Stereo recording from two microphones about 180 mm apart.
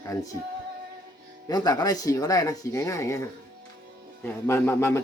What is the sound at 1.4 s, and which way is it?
A man's voice, 20° left (ahead or behind).